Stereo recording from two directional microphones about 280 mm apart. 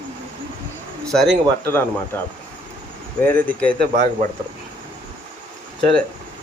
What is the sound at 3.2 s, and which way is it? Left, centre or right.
Speech, centre.